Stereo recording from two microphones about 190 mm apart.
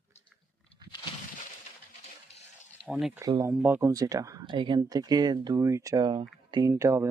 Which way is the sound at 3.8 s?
20° right (ahead or behind).